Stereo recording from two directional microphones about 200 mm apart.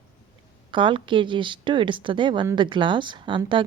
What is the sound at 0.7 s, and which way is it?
Speech, 25° right (ahead or behind).